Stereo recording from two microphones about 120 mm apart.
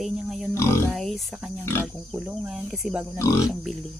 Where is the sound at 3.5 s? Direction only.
5° right (ahead or behind).